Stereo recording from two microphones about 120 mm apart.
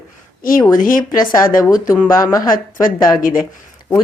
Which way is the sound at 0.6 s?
30° left (ahead or behind).